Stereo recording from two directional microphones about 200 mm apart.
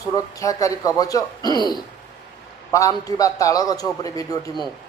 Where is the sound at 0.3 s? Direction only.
15° left (ahead or behind).